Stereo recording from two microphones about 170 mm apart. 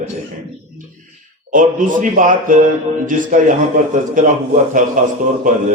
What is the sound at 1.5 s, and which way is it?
A man's voice, 50° right (ahead or behind).